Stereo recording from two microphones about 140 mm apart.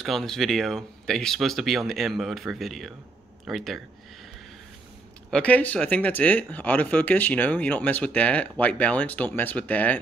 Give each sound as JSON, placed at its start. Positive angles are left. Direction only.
{"t": 0.0, "sound": "speech", "side_deg": 5}
{"t": 5.3, "sound": "speech", "side_deg": 10}